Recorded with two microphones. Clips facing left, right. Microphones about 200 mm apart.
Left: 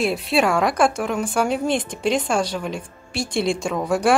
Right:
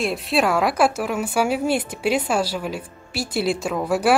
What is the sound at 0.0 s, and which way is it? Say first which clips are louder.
A woman's voice: left 1 dB; centre (ahead or behind).